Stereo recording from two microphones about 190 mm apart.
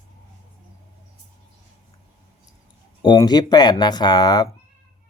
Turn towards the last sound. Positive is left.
turn(degrees=20)  # may be behind; listen again after turning